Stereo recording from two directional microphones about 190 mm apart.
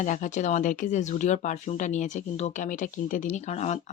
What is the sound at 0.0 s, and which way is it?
Speech, 40° left (ahead or behind).